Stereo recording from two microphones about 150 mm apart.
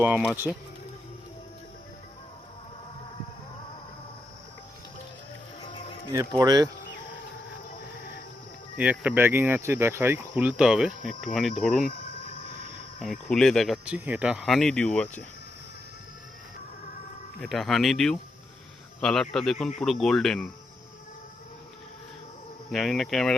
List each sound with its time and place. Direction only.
0.0 s speech: 10° right (ahead or behind)
0.5 s speech: centre (ahead or behind)
6.4 s speech: 25° right (ahead or behind)
8.8 s speech: 10° right (ahead or behind)
13.2 s speech: 5° left (ahead or behind)
17.4 s speech: centre (ahead or behind)
22.7 s speech: centre (ahead or behind)